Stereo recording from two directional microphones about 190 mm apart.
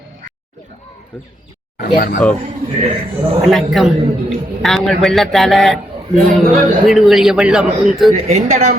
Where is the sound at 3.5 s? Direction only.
Centre (ahead or behind).